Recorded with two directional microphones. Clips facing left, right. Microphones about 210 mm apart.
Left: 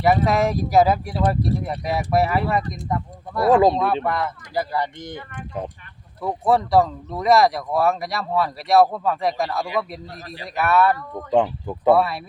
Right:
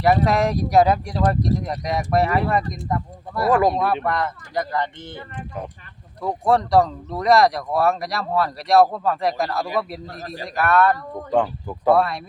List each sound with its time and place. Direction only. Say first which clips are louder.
0.0 s speech: even; centre (ahead or behind)
3.5 s speech: left 3 dB; 25° left (ahead or behind)
4.0 s speech: even; 5° left (ahead or behind)
6.2 s speech: even; 5° left (ahead or behind)
10.1 s a man's voice: right 3 dB; 45° right (ahead or behind)
10.5 s speech: even; 5° left (ahead or behind)
11.3 s speech: left 2 dB; 20° left (ahead or behind)
11.9 s speech: even; 5° left (ahead or behind)